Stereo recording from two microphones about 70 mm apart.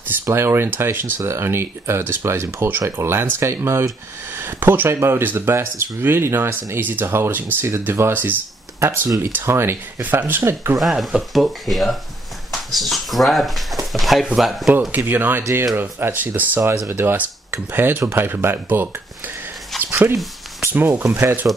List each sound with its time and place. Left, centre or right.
0.2 s speech: right
10.8 s speech: centre
14.9 s speech: right
16.7 s speech: right
17.0 s speech: right
19.7 s a sound: centre
20.6 s speech: right